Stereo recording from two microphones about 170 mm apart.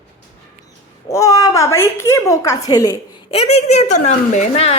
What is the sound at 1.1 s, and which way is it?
A woman's voice, 20° left (ahead or behind).